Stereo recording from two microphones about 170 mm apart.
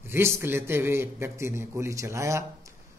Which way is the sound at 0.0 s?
15° right (ahead or behind).